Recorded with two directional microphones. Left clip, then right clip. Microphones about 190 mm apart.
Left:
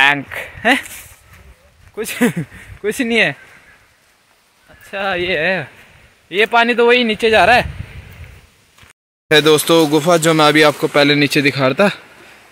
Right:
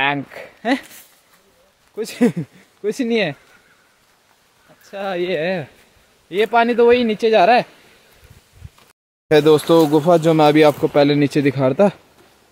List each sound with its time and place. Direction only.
0.0 s speech: 10° right (ahead or behind)
2.0 s speech: 5° right (ahead or behind)
4.8 s speech: 10° right (ahead or behind)
9.3 s speech: 5° right (ahead or behind)
9.6 s speech: 20° left (ahead or behind)
10.0 s speech: 10° right (ahead or behind)